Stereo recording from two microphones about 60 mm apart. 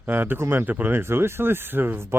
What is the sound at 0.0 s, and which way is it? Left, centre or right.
Speech, right.